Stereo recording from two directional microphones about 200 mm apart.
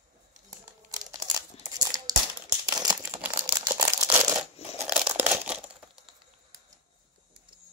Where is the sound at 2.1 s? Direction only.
20° right (ahead or behind).